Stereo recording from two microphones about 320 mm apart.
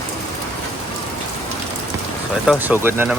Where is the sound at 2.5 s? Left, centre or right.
Centre.